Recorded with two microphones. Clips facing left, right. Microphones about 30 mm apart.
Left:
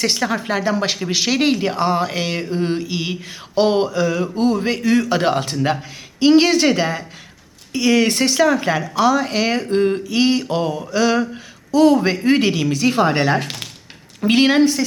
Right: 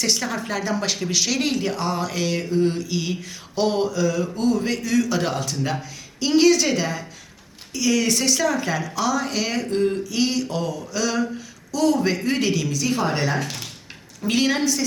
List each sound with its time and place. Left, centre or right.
0.0 s a woman's voice: left